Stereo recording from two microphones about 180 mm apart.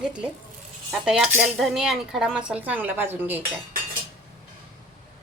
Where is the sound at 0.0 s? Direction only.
5° right (ahead or behind).